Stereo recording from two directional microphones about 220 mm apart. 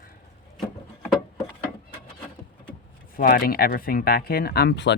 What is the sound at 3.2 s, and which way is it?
Speech, 40° left (ahead or behind).